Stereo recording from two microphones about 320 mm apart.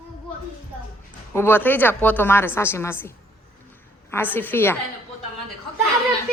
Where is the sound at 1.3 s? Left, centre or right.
Centre.